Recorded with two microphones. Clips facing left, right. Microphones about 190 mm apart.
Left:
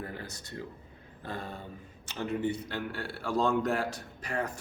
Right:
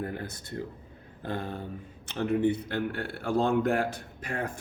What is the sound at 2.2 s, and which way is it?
A man's voice, 55° right (ahead or behind).